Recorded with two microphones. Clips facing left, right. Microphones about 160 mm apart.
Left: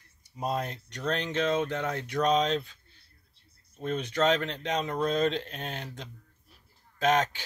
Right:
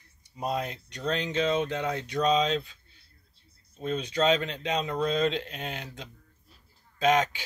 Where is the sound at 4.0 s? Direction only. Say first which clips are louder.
Right 1 dB; 10° right (ahead or behind).